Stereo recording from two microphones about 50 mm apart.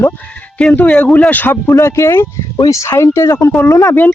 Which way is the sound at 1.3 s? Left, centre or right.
Left.